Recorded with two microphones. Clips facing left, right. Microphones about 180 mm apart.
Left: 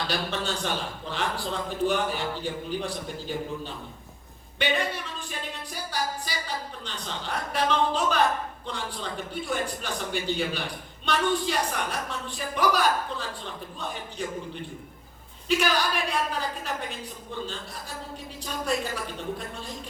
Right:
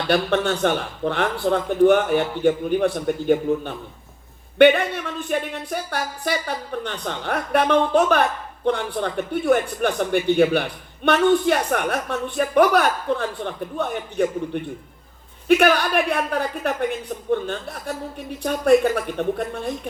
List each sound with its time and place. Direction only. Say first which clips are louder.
0.1 s speech: right 10 dB; 60° right (ahead or behind)